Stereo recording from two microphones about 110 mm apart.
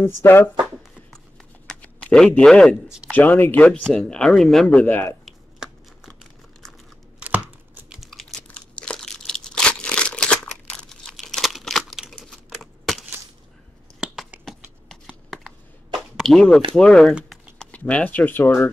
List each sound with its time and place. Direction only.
0.2 s speech: 20° left (ahead or behind)
1.7 s a sound: 10° left (ahead or behind)
3.1 s speech: 15° left (ahead or behind)
5.2 s a sound: centre (ahead or behind)
7.2 s tearing: 10° right (ahead or behind)
7.9 s typing: centre (ahead or behind)
8.5 s crumpling: 10° left (ahead or behind)
13.9 s finger snapping: 5° right (ahead or behind)
14.4 s a sound: 5° left (ahead or behind)
16.7 s speech: 5° left (ahead or behind)